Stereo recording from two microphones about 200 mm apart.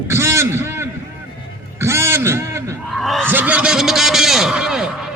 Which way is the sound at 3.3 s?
10° right (ahead or behind).